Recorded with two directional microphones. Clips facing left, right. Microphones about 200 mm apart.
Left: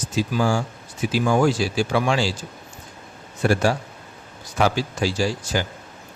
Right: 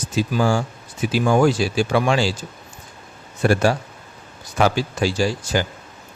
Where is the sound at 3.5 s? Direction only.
60° right (ahead or behind).